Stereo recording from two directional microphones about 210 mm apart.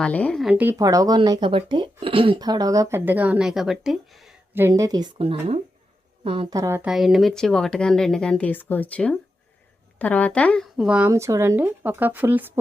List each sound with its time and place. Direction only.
0.0 s speech: 5° left (ahead or behind); by 12.5 s 10° right (ahead or behind)